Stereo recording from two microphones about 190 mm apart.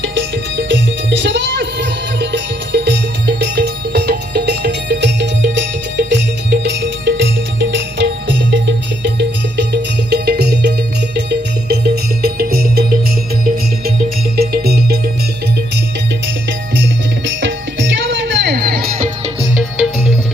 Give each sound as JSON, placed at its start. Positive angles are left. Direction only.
{"t": 0.0, "sound": "music", "side_deg": -70}
{"t": 14.3, "sound": "music", "side_deg": -55}
{"t": 16.2, "sound": "music", "side_deg": -75}
{"t": 19.0, "sound": "music", "side_deg": -35}
{"t": 19.7, "sound": "music", "side_deg": -5}